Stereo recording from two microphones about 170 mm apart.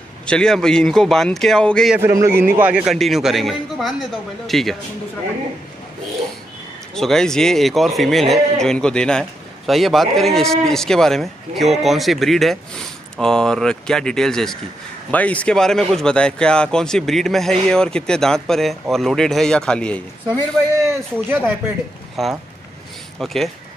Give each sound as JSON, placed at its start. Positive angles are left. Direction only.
{"t": 0.3, "sound": "a man's voice", "side_deg": 5}
{"t": 2.0, "sound": "a man's voice", "side_deg": -15}
{"t": 7.0, "sound": "a man's voice", "side_deg": 5}
{"t": 20.8, "sound": "speech", "side_deg": -15}
{"t": 22.2, "sound": "a man's voice", "side_deg": 0}